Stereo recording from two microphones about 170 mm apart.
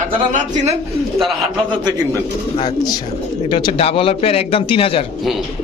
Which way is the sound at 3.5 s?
30° left (ahead or behind).